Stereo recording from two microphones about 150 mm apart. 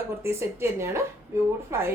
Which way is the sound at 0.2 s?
15° right (ahead or behind).